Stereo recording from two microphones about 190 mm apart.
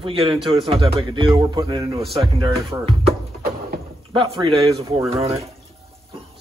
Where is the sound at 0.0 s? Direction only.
30° right (ahead or behind).